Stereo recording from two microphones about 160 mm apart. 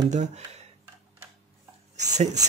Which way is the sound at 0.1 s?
45° right (ahead or behind).